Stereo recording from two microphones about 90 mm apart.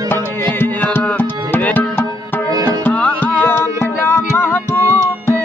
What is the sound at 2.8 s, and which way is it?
Music, 20° left (ahead or behind).